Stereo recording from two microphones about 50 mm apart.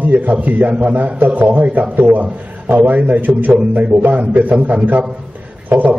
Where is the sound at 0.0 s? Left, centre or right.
Right.